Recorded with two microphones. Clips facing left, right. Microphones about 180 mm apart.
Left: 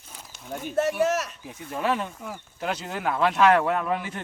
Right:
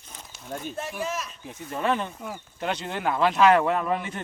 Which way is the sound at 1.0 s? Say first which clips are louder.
Left 7 dB; 70° left (ahead or behind).